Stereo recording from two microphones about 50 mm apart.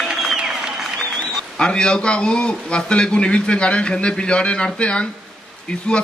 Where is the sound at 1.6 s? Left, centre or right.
Centre.